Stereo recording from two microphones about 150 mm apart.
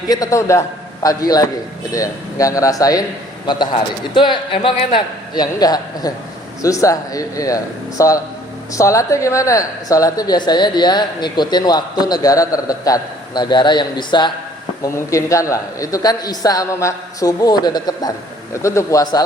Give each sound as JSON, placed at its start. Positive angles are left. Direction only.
{"t": 0.1, "sound": "a woman's voice", "side_deg": 20}